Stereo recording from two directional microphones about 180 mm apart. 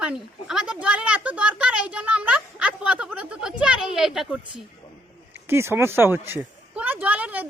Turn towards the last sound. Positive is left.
turn(degrees=-10)  # may be behind; listen again after turning